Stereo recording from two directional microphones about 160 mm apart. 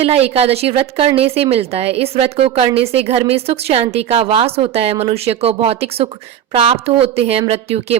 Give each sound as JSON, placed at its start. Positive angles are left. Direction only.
{"t": 0.0, "sound": "a woman's voice", "side_deg": -40}